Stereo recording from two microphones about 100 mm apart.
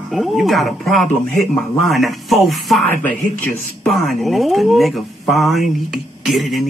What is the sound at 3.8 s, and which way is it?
A man's voice, centre (ahead or behind).